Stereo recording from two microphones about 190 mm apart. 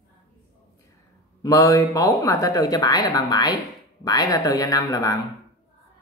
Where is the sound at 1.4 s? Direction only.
15° left (ahead or behind).